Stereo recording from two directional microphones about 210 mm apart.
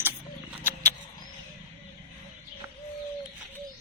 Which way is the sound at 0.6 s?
10° right (ahead or behind).